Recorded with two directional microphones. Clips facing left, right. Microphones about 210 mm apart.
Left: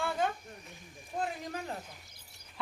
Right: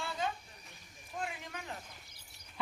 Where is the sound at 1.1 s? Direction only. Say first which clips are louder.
Left 6 dB; 35° left (ahead or behind).